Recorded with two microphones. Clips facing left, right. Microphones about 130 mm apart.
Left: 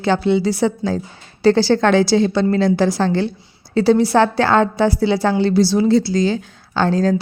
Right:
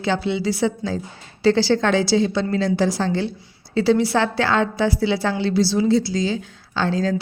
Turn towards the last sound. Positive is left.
turn(degrees=50)  # may be behind; listen again after turning